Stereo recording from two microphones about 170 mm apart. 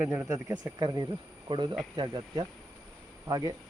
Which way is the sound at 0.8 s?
25° right (ahead or behind).